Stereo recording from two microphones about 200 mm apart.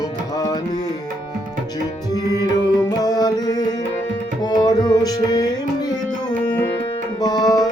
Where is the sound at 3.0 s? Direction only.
20° left (ahead or behind).